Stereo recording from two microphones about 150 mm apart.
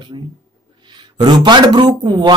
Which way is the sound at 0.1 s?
35° right (ahead or behind).